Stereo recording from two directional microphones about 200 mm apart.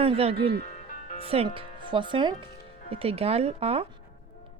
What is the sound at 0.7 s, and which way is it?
Music, 40° left (ahead or behind).